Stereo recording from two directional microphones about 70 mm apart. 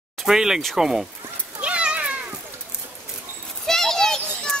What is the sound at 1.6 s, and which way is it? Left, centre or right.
Cat, centre.